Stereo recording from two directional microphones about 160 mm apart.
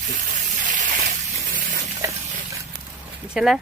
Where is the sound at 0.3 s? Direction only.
55° right (ahead or behind).